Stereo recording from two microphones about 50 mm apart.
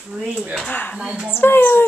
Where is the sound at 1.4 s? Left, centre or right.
Left.